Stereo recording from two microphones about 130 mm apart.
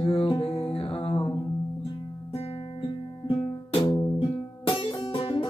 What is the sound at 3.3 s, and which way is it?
Music, 45° left (ahead or behind).